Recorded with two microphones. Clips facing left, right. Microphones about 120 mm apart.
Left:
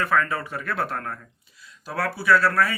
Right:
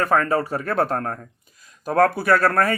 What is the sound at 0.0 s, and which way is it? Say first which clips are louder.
Speech: right 4 dB; 40° right (ahead or behind).